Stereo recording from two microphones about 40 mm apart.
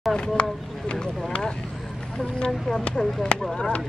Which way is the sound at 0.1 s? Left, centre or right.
Left.